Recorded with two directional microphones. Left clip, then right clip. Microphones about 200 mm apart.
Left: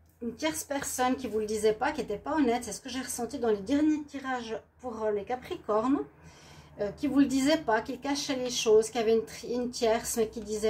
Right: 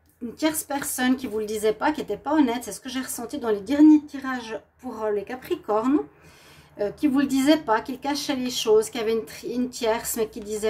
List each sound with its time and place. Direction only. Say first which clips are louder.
0.4 s a woman's voice: right 7 dB; 50° right (ahead or behind)
7.0 s a woman's voice: right 3 dB; 50° right (ahead or behind)